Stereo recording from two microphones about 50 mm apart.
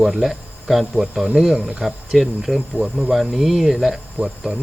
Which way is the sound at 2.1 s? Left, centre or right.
Centre.